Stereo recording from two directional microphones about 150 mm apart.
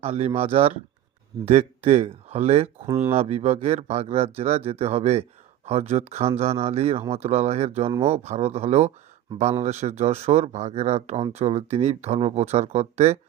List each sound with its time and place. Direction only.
0.0 s speech: 45° right (ahead or behind)